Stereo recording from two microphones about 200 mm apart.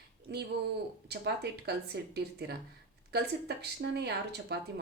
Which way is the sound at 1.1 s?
55° right (ahead or behind).